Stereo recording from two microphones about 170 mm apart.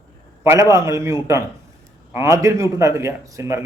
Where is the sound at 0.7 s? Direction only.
15° right (ahead or behind).